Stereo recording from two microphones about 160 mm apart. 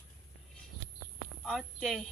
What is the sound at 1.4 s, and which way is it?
Speech, centre (ahead or behind).